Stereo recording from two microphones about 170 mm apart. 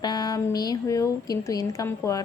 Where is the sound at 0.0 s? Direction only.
25° left (ahead or behind).